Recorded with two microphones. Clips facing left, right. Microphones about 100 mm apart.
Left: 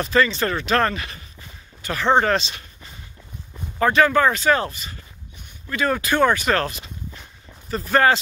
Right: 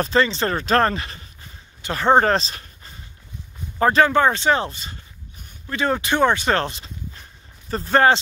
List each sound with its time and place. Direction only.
0.0 s speech: 30° right (ahead or behind)
2.0 s speech: 35° right (ahead or behind)